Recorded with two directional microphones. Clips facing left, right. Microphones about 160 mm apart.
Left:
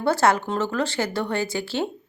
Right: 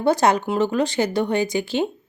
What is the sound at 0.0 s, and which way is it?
Speech, 15° right (ahead or behind).